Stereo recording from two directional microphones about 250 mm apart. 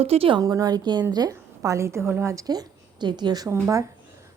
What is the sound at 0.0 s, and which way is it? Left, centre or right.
A woman's voice, right.